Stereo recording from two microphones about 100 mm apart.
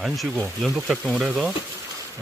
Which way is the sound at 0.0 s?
Centre (ahead or behind).